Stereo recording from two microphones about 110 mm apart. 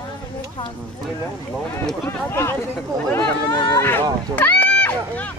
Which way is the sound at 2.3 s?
25° left (ahead or behind).